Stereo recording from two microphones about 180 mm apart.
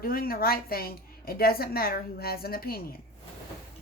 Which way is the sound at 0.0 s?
55° left (ahead or behind).